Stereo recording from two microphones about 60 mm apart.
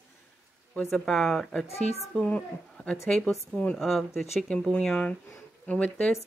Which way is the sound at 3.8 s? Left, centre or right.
Centre.